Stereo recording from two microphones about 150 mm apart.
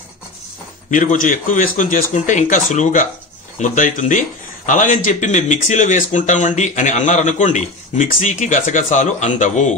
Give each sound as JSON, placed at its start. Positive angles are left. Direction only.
{"t": 0.8, "sound": "speech", "side_deg": 60}